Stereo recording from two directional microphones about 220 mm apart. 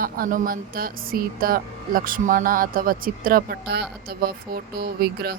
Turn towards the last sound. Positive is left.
turn(degrees=-45)  # may be behind; listen again after turning